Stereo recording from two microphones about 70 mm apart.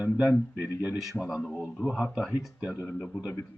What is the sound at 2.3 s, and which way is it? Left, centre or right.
Speech, centre.